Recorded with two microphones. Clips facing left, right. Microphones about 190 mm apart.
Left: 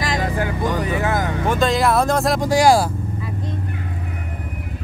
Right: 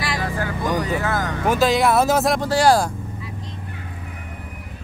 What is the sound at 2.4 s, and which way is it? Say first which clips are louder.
Speech: left 4 dB; 10° left (ahead or behind).